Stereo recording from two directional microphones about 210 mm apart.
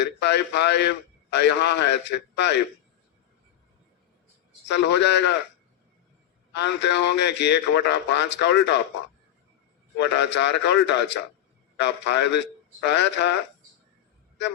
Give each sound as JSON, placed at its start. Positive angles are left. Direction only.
{"t": 0.0, "sound": "a man's voice", "side_deg": 55}
{"t": 4.7, "sound": "a man's voice", "side_deg": 55}
{"t": 6.5, "sound": "a man's voice", "side_deg": 55}
{"t": 10.0, "sound": "a man's voice", "side_deg": 55}